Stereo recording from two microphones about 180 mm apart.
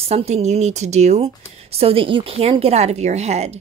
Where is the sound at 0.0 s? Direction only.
35° right (ahead or behind).